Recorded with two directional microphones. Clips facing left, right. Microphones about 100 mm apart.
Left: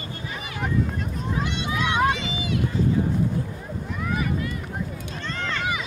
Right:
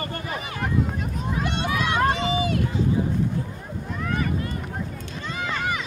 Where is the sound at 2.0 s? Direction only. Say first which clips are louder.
Right 2 dB; 40° right (ahead or behind).